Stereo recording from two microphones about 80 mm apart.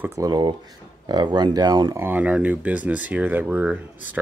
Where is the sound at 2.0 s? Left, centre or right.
Right.